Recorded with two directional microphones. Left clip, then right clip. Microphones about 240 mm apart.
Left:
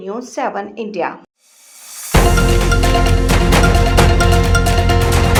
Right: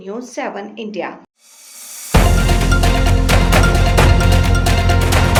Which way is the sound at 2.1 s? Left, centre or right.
Centre.